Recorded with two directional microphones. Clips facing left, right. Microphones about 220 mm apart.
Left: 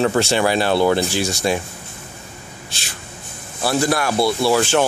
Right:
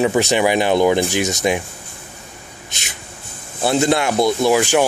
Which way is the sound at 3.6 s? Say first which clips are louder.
Right 3 dB; 20° right (ahead or behind).